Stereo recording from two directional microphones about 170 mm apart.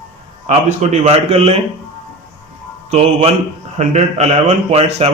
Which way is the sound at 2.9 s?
35° right (ahead or behind).